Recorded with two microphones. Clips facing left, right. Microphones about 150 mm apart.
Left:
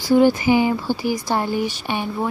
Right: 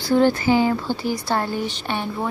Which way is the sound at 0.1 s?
10° left (ahead or behind).